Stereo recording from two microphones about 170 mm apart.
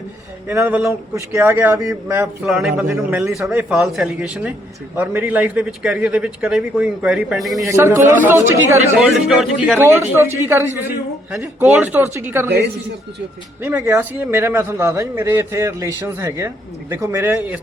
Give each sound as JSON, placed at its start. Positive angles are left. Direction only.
{"t": 0.4, "sound": "a man's voice", "side_deg": -10}
{"t": 2.4, "sound": "a man's voice", "side_deg": -5}
{"t": 7.6, "sound": "a man's voice", "side_deg": -15}
{"t": 9.0, "sound": "a man's voice", "side_deg": -5}